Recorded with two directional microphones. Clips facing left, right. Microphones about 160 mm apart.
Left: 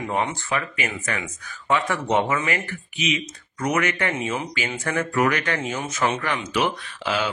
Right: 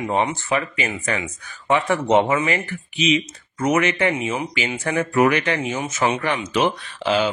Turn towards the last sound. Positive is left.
turn(degrees=-25)  # may be behind; listen again after turning